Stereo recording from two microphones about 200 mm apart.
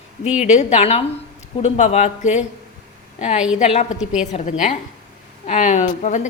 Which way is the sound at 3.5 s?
35° left (ahead or behind).